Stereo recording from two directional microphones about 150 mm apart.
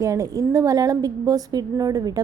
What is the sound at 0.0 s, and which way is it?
A woman's voice, 20° right (ahead or behind).